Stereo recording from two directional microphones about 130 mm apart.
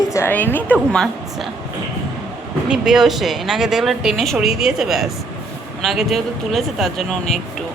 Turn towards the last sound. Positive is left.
turn(degrees=0)  # may be behind; listen again after turning